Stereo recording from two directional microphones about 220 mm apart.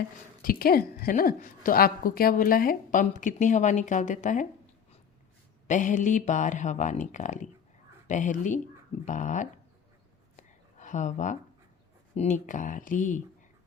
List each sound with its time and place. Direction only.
0.4 s a woman's voice: 40° left (ahead or behind)
5.6 s a woman's voice: 35° left (ahead or behind)
10.3 s a sound: 35° left (ahead or behind)
12.1 s a woman's voice: 30° left (ahead or behind)